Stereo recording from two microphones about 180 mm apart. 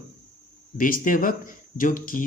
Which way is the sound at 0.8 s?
50° left (ahead or behind).